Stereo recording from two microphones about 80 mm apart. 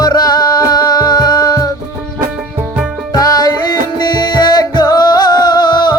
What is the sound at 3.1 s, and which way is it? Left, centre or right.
Music, left.